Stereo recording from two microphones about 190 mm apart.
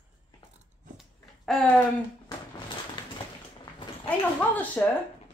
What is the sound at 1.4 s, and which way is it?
Speech, centre (ahead or behind).